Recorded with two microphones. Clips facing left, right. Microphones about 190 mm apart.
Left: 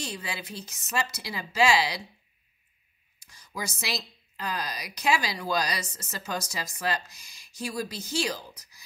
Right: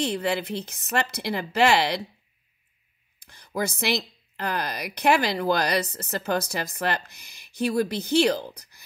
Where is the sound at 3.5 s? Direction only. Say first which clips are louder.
Right 8 dB; 60° right (ahead or behind).